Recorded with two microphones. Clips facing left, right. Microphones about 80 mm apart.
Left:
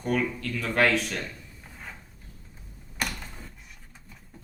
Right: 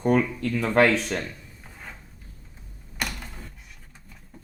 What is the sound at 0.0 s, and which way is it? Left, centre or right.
Speech, right.